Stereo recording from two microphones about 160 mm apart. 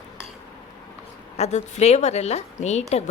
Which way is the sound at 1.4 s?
45° left (ahead or behind).